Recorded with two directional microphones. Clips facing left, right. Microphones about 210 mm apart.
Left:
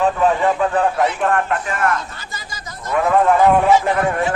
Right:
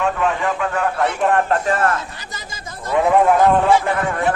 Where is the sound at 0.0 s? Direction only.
35° left (ahead or behind).